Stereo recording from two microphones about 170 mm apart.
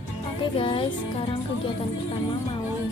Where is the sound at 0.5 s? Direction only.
30° left (ahead or behind).